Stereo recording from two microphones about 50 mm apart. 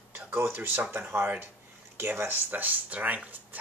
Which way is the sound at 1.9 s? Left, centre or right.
Right.